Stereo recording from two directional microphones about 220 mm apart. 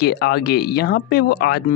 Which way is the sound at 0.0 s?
45° left (ahead or behind).